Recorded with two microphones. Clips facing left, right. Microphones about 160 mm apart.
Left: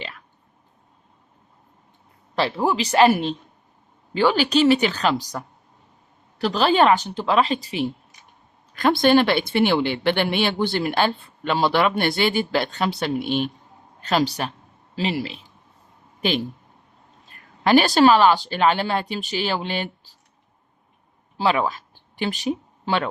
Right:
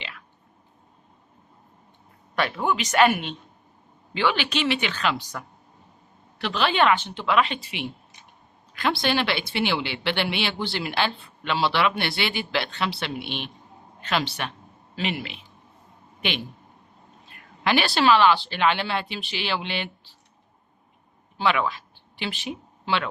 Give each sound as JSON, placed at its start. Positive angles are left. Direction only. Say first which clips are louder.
{"t": 2.3, "sound": "speech", "louder": "left 3 dB", "side_deg": 30}
{"t": 17.2, "sound": "speech", "louder": "left 5 dB", "side_deg": 40}
{"t": 21.3, "sound": "a sound", "louder": "left 3 dB", "side_deg": 35}